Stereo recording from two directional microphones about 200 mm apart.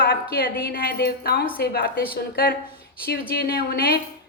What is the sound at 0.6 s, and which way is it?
A woman's voice, 45° left (ahead or behind).